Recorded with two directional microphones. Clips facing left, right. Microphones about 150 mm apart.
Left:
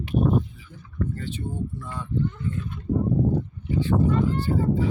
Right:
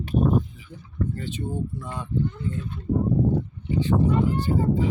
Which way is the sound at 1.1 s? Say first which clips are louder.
Right 1 dB; 15° right (ahead or behind).